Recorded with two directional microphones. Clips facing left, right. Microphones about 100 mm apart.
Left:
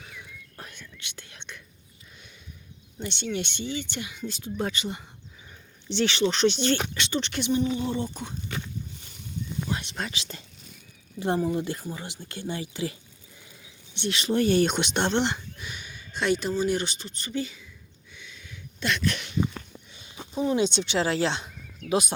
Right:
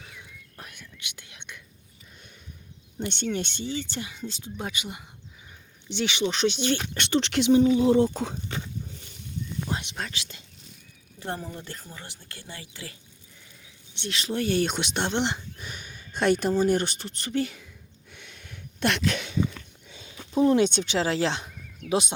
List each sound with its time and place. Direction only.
0.6 s whispering: 15° right (ahead or behind)
3.0 s speech: 50° right (ahead or behind); by 6.7 s 10° right (ahead or behind)
6.9 s speech: 55° right (ahead or behind)
7.2 s speech: 90° right
8.5 s speech: 30° right (ahead or behind)
10.0 s speech: 5° right (ahead or behind)
10.3 s speech: 40° left (ahead or behind)
11.2 s speech: 15° left (ahead or behind)
13.9 s speech: centre (ahead or behind)
15.1 s speech: 20° right (ahead or behind)
15.5 s speech: 40° right (ahead or behind); by 17.7 s 60° right (ahead or behind)
18.1 s a sound: 60° right (ahead or behind)
20.6 s speech: 50° right (ahead or behind)
21.8 s speech: 25° right (ahead or behind)